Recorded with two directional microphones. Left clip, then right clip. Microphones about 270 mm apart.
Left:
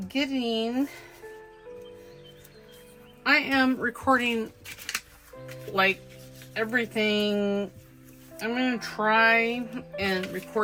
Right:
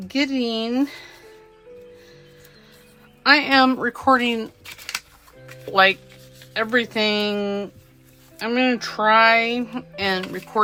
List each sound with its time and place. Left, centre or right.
0.1 s speech: centre
3.2 s speech: centre